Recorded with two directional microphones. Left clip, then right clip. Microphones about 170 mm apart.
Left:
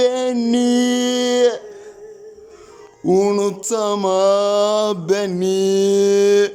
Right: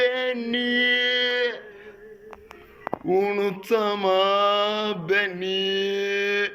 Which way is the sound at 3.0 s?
25° left (ahead or behind).